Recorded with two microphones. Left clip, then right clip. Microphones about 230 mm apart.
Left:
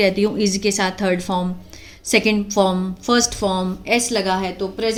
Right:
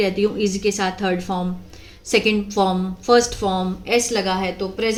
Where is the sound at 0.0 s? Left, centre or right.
Left.